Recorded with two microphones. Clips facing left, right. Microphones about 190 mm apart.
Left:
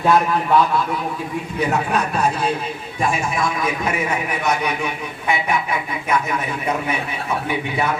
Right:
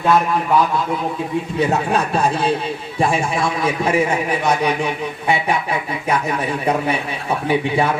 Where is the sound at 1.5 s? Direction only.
30° right (ahead or behind).